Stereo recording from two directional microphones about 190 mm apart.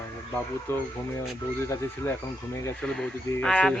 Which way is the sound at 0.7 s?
15° left (ahead or behind).